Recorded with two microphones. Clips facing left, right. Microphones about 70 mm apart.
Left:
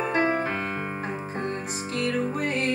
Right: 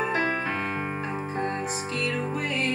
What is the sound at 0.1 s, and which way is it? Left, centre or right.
Music, left.